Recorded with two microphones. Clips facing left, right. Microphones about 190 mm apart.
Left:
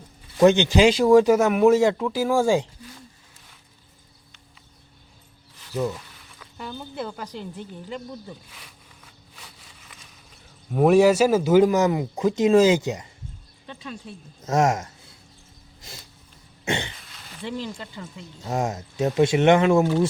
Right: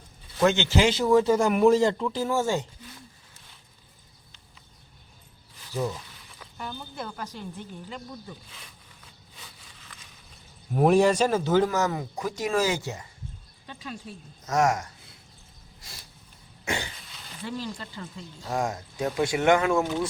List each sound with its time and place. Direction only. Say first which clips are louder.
0.3 s speech: left 6 dB; 15° left (ahead or behind)
5.7 s speech: left 3 dB; centre (ahead or behind)
10.8 s speech: left 4 dB; centre (ahead or behind); by 13.1 s 20° left (ahead or behind)
14.4 s speech: left 3 dB; 25° left (ahead or behind)
16.6 s speech: left 4 dB; 25° left (ahead or behind)